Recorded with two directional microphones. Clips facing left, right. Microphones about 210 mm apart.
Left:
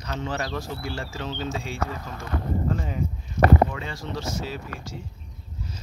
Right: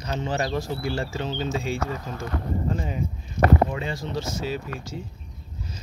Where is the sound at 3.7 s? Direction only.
25° right (ahead or behind).